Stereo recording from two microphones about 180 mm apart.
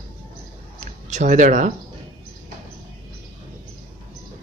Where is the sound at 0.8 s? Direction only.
40° right (ahead or behind).